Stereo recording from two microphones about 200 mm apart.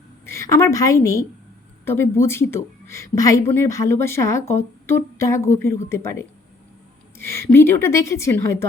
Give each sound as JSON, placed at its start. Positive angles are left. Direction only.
{"t": 0.3, "sound": "a woman's voice", "side_deg": 15}